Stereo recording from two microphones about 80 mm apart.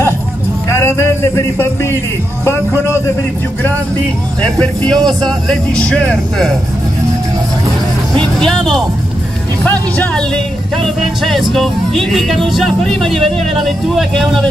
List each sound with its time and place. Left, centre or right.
0.7 s a man's voice: left
4.4 s speech: centre
8.4 s music: centre